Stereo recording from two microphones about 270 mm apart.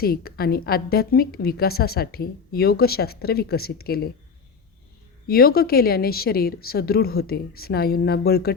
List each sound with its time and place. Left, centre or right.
0.0 s a woman's voice: left
5.3 s a woman's voice: left